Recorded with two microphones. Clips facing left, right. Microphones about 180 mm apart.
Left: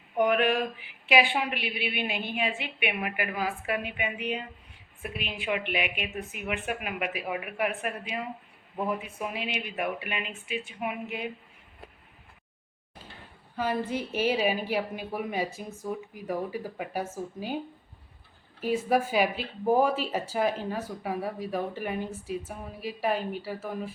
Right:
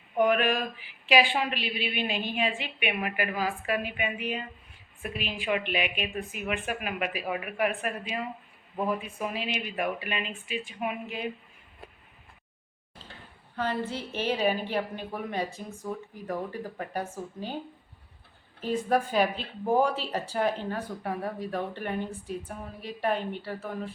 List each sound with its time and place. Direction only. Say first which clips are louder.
0.2 s a woman's voice: even; 15° left (ahead or behind)
13.6 s a woman's voice: left 2 dB; 10° left (ahead or behind)
18.6 s a woman's voice: left 1 dB; 10° left (ahead or behind)